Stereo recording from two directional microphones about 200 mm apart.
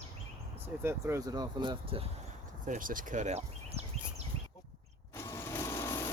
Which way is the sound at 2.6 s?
40° right (ahead or behind).